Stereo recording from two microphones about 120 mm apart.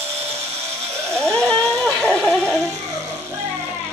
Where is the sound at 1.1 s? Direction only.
5° left (ahead or behind).